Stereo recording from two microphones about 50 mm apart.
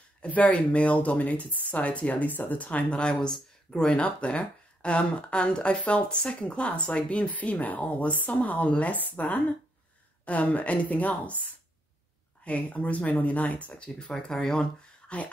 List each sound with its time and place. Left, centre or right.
0.2 s a woman's voice: left
13.9 s speech: centre